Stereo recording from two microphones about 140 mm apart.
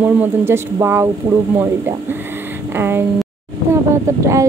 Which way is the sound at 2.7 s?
15° right (ahead or behind).